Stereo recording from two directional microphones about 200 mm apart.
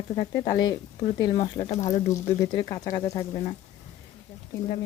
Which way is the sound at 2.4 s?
20° left (ahead or behind).